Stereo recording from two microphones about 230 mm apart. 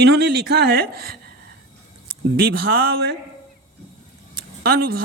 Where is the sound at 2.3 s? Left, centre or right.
Right.